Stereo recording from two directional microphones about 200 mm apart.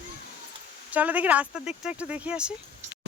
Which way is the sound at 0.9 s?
10° right (ahead or behind).